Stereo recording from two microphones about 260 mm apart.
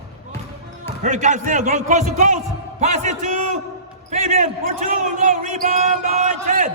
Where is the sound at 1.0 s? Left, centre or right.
Right.